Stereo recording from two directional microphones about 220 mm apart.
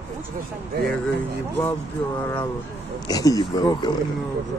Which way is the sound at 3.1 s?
15° left (ahead or behind).